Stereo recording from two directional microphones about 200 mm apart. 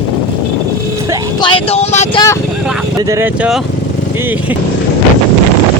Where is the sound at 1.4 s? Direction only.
30° left (ahead or behind).